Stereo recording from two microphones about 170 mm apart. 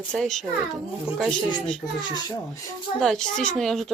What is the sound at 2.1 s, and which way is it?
Speech, 20° left (ahead or behind).